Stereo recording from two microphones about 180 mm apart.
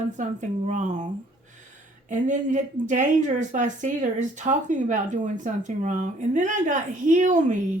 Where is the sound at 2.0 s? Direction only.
45° right (ahead or behind).